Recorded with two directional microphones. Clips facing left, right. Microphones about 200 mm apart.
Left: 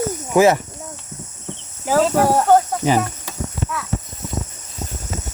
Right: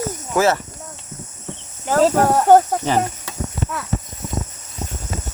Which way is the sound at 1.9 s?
5° left (ahead or behind).